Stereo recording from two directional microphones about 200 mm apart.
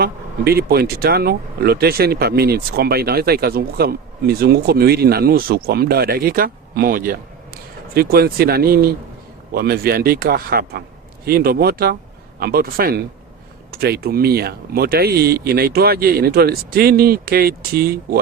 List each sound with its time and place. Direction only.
0.0 s speech: 50° right (ahead or behind)